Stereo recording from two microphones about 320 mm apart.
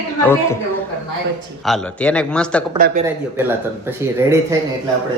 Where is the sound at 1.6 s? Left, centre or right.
Centre.